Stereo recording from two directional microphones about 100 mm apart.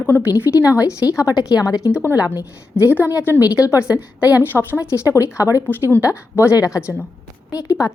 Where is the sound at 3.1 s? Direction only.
25° left (ahead or behind).